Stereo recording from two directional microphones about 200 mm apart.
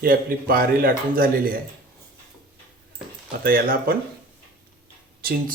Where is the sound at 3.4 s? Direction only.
45° right (ahead or behind).